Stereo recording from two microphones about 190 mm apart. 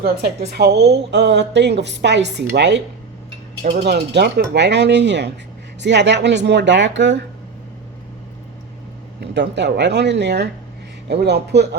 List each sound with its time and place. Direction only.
0.4 s a woman's voice: 60° right (ahead or behind)
3.8 s a woman's voice: 60° right (ahead or behind)
9.2 s a woman's voice: 65° right (ahead or behind)